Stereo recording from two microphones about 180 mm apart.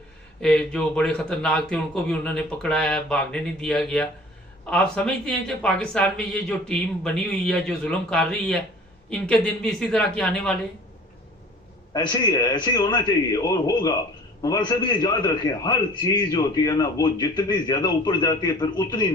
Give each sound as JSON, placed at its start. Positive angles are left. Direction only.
{"t": 0.4, "sound": "speech", "side_deg": 5}
{"t": 11.9, "sound": "a man's voice", "side_deg": 25}